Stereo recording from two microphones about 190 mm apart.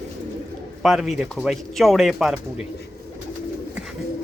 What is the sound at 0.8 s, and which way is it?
Speech, centre (ahead or behind).